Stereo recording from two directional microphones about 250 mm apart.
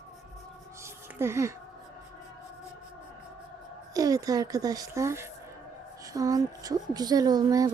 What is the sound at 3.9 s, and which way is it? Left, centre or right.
A woman's voice, centre.